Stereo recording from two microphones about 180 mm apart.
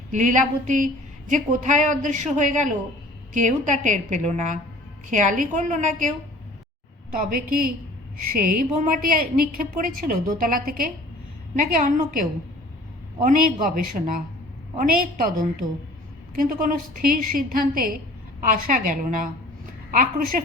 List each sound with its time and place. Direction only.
0.1 s a woman's voice: 45° right (ahead or behind)
7.1 s a woman's voice: 50° right (ahead or behind)